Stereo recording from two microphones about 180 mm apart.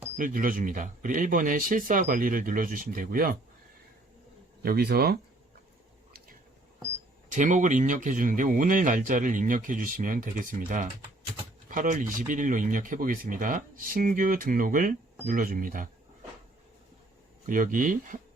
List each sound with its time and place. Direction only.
0.2 s speech: 50° right (ahead or behind)
4.6 s speech: 60° right (ahead or behind)
7.3 s speech: 45° right (ahead or behind)
17.4 s speech: 50° right (ahead or behind)